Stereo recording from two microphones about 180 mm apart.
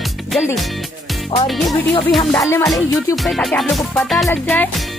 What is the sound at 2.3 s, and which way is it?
Speech, 15° left (ahead or behind).